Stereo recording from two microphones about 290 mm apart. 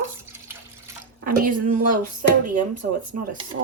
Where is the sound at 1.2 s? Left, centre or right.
Right.